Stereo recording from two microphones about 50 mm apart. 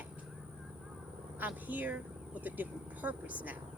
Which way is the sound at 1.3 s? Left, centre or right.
Right.